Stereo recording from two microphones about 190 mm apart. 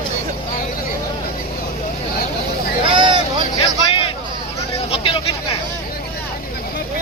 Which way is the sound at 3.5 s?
30° left (ahead or behind).